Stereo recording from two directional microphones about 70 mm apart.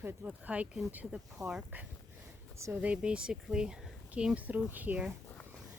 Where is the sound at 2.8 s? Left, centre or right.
Centre.